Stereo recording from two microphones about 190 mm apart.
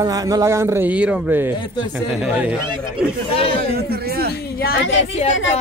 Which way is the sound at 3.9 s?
55° right (ahead or behind).